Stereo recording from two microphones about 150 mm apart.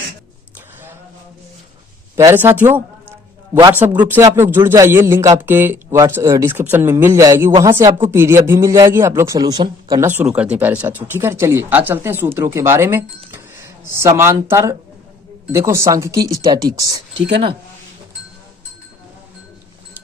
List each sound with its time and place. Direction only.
2.1 s a man's voice: 15° right (ahead or behind)
10.1 s a man's voice: 10° right (ahead or behind)